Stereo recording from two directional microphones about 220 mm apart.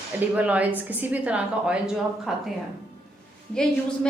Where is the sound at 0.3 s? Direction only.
5° right (ahead or behind).